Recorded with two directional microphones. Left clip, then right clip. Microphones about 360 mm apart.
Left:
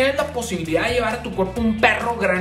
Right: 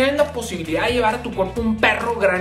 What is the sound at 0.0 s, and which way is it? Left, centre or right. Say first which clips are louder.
Speech: right 2 dB; centre.